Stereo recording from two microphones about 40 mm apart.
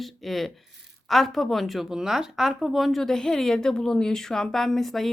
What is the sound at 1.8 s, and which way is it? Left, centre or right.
A woman's voice, centre.